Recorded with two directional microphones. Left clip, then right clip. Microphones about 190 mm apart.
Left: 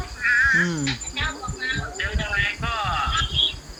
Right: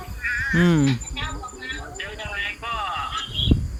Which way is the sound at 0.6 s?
45° right (ahead or behind).